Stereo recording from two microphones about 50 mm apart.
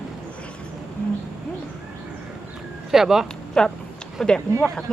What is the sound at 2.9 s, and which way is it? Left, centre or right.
Speech, centre.